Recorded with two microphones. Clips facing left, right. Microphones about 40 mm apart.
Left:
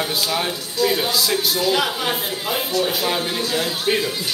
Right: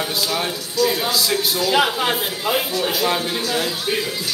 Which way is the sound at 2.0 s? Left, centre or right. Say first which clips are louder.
Right 2 dB; centre.